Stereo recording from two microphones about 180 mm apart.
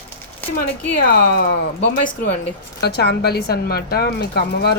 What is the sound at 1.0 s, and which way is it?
Speech, 60° left (ahead or behind).